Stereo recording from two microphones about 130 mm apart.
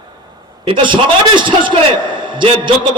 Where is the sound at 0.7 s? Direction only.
40° right (ahead or behind).